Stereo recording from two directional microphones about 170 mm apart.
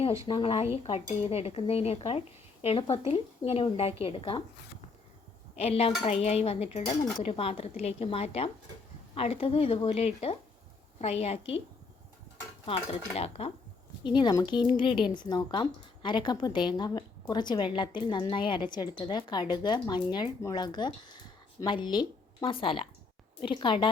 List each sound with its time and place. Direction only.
0.3 s speech: 30° left (ahead or behind)
5.5 s speech: 35° left (ahead or behind)
12.6 s speech: 35° left (ahead or behind)
14.2 s speech: 25° left (ahead or behind)